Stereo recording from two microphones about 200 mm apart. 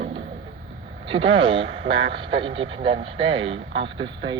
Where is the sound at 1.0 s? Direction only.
25° right (ahead or behind).